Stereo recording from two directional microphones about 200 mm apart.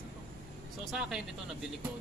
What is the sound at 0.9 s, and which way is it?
Speech, 5° right (ahead or behind).